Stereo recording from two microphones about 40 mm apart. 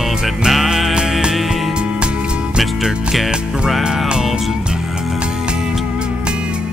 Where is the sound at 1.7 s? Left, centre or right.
Right.